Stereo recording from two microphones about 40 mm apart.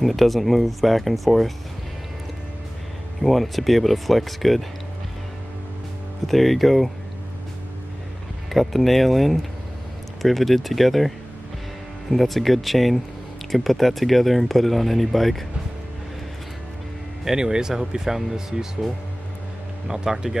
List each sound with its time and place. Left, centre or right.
0.0 s speech: centre
3.2 s speech: centre
6.2 s speech: centre
8.5 s speech: centre
17.2 s speech: centre
19.9 s speech: centre